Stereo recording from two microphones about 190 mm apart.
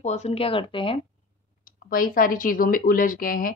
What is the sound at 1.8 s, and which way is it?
Speech, 45° left (ahead or behind).